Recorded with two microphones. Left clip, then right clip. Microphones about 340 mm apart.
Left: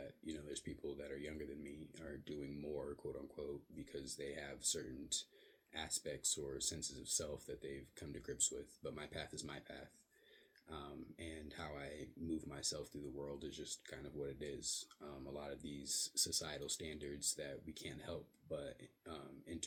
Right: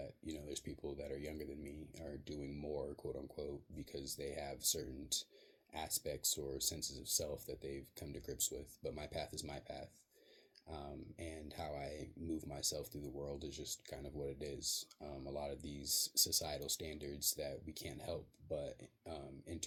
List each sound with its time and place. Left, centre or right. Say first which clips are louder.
0.3 s a sound: even; right
4.2 s speech: right 4 dB; right
5.7 s speech: right 2 dB; centre
15.8 s speech: right 5 dB; centre
16.2 s speech: right 4 dB; right